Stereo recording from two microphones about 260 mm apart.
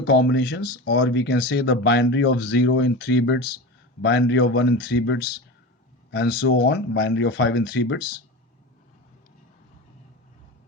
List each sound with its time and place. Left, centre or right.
0.1 s speech: left